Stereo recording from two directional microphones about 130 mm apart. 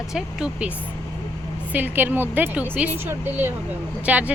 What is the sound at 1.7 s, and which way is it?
Speech, 15° right (ahead or behind).